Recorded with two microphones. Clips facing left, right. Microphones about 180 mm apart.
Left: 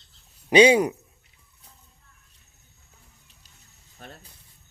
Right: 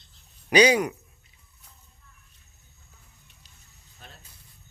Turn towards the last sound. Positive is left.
turn(degrees=50)  # may be behind; listen again after turning